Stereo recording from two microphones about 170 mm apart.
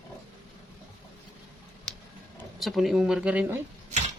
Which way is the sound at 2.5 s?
Centre (ahead or behind).